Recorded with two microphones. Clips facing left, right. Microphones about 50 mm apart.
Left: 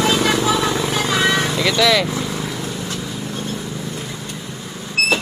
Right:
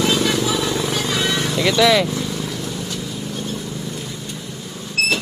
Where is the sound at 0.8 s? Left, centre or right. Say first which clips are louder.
Left 3 dB; centre.